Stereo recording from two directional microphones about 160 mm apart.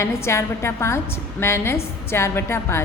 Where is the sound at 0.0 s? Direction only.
15° left (ahead or behind).